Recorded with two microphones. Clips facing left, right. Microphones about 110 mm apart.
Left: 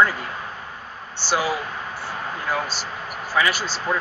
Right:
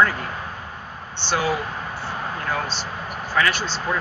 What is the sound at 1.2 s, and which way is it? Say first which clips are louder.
Speech: even; 10° left (ahead or behind).